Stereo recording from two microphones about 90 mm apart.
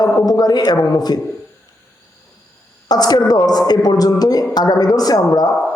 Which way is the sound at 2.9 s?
50° left (ahead or behind).